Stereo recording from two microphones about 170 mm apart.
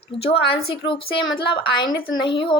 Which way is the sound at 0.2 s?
35° left (ahead or behind).